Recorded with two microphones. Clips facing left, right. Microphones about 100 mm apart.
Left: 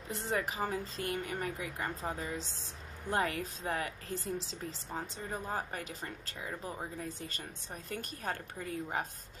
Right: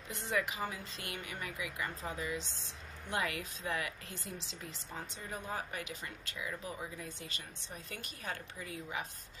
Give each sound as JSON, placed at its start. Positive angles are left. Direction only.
{"t": 0.1, "sound": "speech", "side_deg": 35}